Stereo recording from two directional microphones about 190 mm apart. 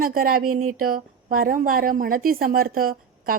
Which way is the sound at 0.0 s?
50° right (ahead or behind).